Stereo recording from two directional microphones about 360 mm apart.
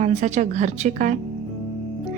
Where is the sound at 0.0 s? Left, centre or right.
Centre.